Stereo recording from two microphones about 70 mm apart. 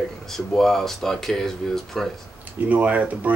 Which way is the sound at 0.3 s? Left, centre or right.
Centre.